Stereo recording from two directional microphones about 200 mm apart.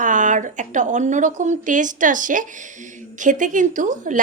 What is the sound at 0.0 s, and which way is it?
A woman's voice, 40° right (ahead or behind).